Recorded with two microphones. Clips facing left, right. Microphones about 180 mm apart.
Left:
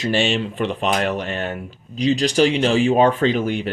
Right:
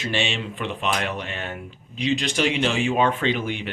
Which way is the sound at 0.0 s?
40° left (ahead or behind).